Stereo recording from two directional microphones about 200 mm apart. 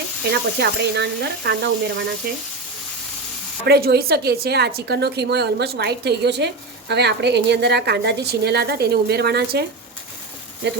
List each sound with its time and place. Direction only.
0.3 s a woman's voice: 55° right (ahead or behind)
3.6 s a woman's voice: 50° right (ahead or behind)